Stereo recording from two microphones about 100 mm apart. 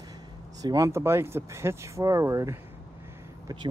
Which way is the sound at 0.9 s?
25° right (ahead or behind).